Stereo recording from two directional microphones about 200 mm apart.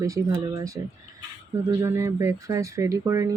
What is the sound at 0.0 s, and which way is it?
Speech, 15° right (ahead or behind).